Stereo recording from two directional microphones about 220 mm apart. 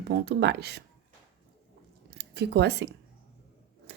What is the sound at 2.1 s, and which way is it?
Speech, 50° right (ahead or behind).